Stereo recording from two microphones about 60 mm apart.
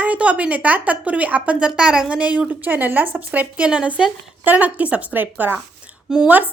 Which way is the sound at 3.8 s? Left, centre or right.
Centre.